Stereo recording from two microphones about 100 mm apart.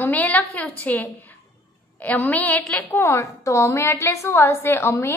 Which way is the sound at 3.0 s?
30° left (ahead or behind).